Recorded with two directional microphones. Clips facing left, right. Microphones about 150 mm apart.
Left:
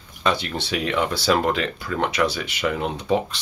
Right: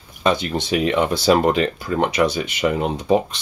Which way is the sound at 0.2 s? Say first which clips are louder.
Right 4 dB; 20° right (ahead or behind).